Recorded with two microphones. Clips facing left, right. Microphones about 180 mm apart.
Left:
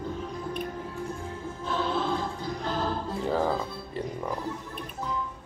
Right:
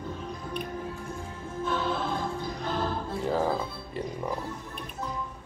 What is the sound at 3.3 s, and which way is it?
Music, 5° right (ahead or behind).